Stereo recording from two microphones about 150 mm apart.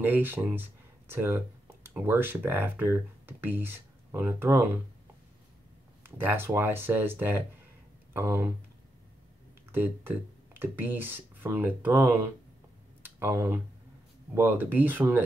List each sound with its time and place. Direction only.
0.0 s speech: 10° right (ahead or behind)
6.0 s speech: 15° right (ahead or behind)
9.7 s speech: 15° right (ahead or behind)